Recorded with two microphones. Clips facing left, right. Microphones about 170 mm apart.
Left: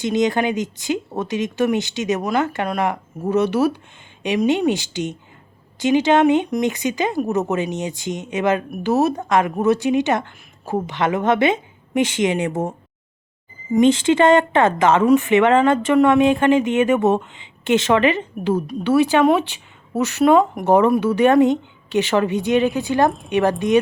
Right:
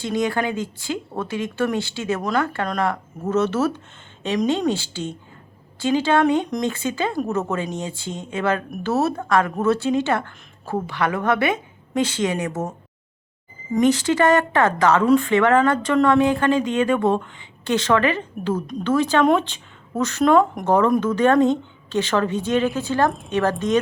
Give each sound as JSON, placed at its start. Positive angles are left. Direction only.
{"t": 0.0, "sound": "speech", "side_deg": 20}
{"t": 13.7, "sound": "speech", "side_deg": 25}